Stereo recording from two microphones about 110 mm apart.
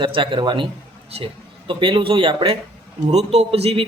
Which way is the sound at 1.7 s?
50° right (ahead or behind).